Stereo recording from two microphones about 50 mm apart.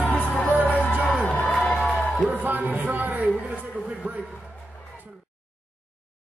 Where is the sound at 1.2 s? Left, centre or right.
Left.